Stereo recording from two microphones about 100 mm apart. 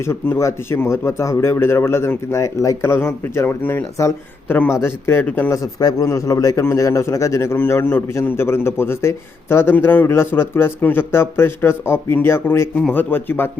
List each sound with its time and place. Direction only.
0.0 s a man's voice: 25° left (ahead or behind)